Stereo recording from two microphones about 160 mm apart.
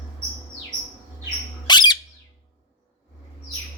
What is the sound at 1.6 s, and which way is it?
Bird, 25° left (ahead or behind).